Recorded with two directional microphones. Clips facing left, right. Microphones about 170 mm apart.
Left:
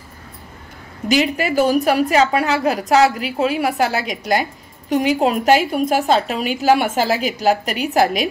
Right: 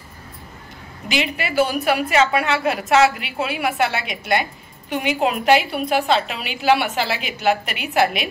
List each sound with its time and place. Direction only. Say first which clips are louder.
1.0 s a woman's voice: left 6 dB; 40° left (ahead or behind)